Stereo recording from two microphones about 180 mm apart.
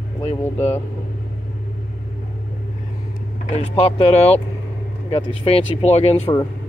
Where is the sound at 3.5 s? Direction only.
35° left (ahead or behind).